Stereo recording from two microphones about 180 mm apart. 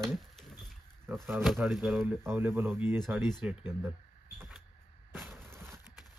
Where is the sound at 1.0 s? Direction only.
15° right (ahead or behind).